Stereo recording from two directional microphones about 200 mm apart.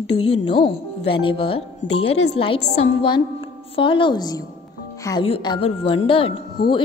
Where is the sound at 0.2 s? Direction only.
25° left (ahead or behind).